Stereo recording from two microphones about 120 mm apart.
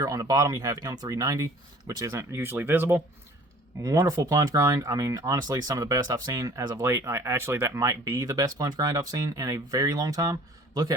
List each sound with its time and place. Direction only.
0.0 s speech: 30° right (ahead or behind)
3.8 s speech: 30° right (ahead or behind)